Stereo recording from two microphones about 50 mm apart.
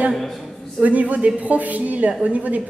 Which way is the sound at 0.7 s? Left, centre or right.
Right.